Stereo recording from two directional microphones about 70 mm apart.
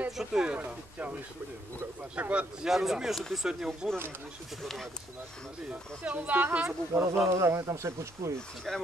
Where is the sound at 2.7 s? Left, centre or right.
Centre.